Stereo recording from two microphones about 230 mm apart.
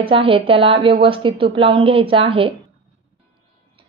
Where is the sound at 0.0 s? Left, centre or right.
Right.